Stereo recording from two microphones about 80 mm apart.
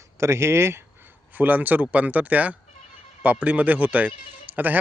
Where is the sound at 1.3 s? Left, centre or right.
Right.